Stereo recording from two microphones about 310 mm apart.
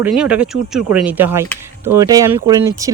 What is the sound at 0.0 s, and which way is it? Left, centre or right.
Speech, centre.